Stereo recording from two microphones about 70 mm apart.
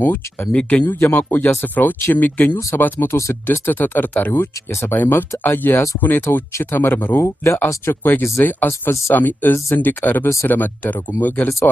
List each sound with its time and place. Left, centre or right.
0.5 s speech: centre
3.1 s speech: left
3.4 s speech: left